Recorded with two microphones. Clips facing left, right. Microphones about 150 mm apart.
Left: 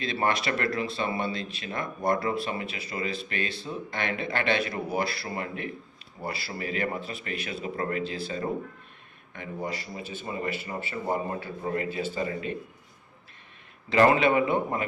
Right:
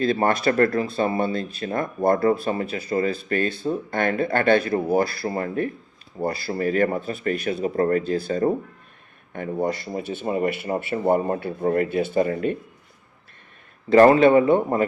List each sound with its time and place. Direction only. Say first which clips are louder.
0.0 s speech: right 7 dB; 45° right (ahead or behind)
13.9 s speech: right 8 dB; 40° right (ahead or behind)